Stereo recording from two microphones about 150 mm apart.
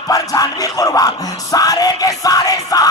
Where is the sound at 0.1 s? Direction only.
25° left (ahead or behind).